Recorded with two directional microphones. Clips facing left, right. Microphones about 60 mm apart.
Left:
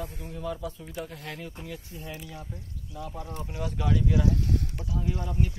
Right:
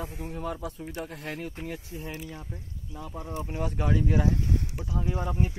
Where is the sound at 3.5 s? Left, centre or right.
Right.